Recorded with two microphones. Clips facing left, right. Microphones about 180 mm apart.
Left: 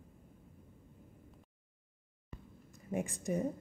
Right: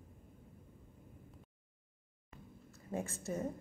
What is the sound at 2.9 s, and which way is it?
Speech, 15° left (ahead or behind).